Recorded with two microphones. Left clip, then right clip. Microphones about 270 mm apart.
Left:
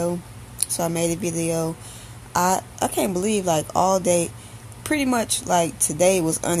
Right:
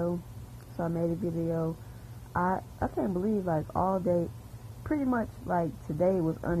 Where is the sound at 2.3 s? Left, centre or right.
Centre.